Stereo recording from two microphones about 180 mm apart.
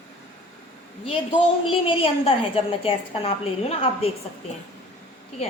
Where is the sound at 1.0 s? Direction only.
30° left (ahead or behind).